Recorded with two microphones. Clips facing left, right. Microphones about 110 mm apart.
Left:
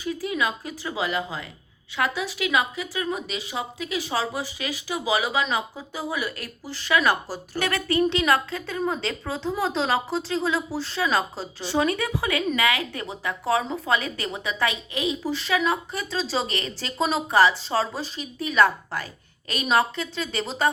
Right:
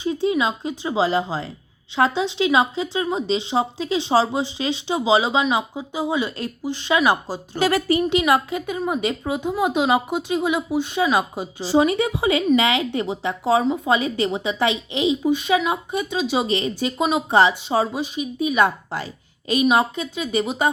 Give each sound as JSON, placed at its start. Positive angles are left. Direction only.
{"t": 0.0, "sound": "a woman's voice", "side_deg": -25}